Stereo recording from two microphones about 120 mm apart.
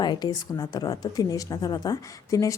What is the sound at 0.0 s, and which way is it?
A woman's voice, 35° left (ahead or behind).